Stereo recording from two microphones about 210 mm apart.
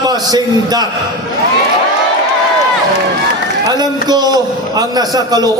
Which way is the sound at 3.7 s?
20° right (ahead or behind).